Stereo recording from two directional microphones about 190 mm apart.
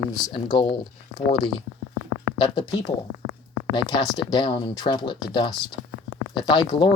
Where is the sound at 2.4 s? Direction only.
20° left (ahead or behind).